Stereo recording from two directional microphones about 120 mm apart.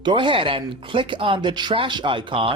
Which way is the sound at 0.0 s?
45° right (ahead or behind).